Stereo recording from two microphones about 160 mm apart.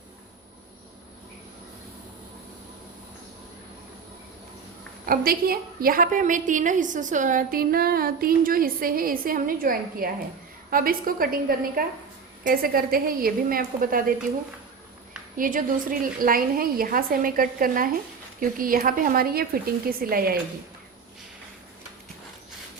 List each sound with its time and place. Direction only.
5.0 s a woman's voice: 65° right (ahead or behind)
15.4 s a woman's voice: 55° right (ahead or behind)